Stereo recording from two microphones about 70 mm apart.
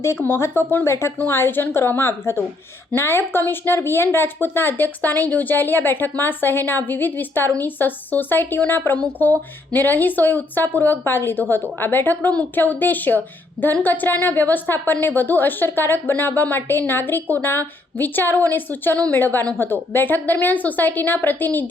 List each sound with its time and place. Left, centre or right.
0.0 s a woman's voice: left